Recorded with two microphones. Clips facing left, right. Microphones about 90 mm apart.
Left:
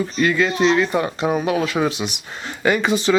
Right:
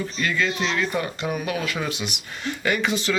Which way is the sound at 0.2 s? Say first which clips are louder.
Left 7 dB; 30° left (ahead or behind).